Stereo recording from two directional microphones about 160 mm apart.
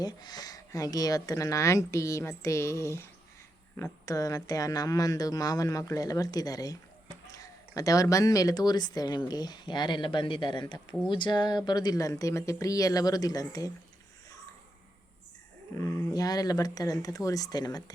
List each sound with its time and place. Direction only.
0.0 s speech: 25° left (ahead or behind)
15.8 s speech: 20° left (ahead or behind)